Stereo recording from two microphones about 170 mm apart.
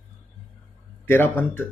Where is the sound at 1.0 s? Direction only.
10° left (ahead or behind).